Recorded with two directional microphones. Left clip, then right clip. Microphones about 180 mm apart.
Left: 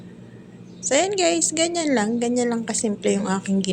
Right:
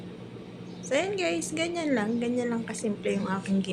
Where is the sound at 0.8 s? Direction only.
30° left (ahead or behind).